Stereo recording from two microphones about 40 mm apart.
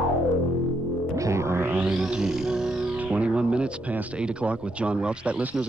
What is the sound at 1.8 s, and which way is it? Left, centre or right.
Music, right.